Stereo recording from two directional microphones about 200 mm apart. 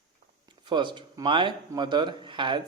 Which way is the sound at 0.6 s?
25° right (ahead or behind).